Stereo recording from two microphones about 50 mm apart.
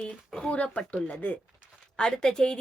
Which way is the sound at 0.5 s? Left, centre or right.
Left.